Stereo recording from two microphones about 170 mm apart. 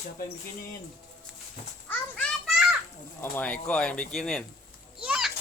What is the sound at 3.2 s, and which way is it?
Speech, 10° left (ahead or behind).